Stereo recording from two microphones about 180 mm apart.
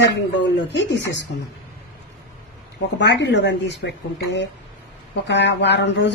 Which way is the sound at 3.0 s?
75° left (ahead or behind).